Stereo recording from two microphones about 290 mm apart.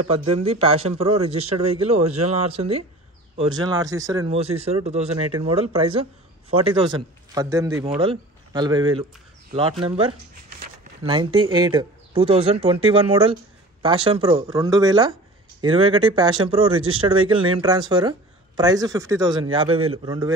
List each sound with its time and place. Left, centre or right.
0.3 s a man's voice: centre